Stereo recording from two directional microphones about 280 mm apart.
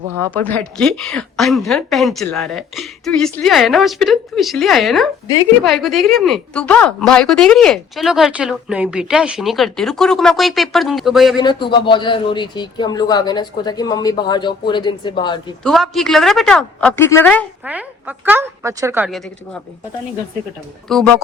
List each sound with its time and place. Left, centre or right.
0.3 s a woman's voice: centre
11.3 s a man's voice: centre
15.6 s a woman's voice: centre
18.3 s a woman's voice: centre
20.9 s a woman's voice: centre